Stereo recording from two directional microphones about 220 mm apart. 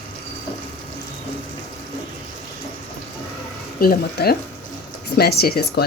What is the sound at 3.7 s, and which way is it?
Speech, 40° left (ahead or behind).